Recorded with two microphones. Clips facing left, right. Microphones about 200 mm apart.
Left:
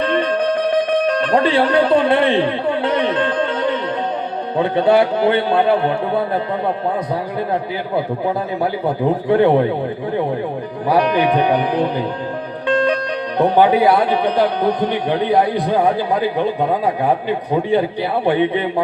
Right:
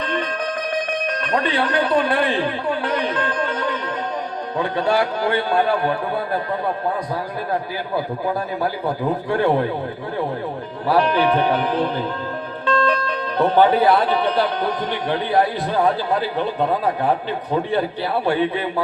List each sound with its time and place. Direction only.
0.2 s music: 30° left (ahead or behind)
4.5 s a man's voice: 25° left (ahead or behind)
8.6 s a man's voice: 20° left (ahead or behind)
10.8 s a man's voice: 15° left (ahead or behind)